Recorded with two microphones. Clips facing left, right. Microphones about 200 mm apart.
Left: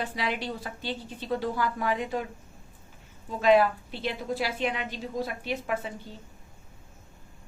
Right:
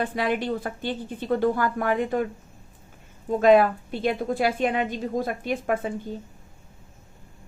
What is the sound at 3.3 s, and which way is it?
A woman's voice, 50° right (ahead or behind).